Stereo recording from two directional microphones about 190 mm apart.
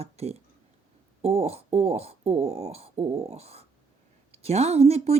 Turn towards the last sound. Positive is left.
turn(degrees=-35)  # may be behind; listen again after turning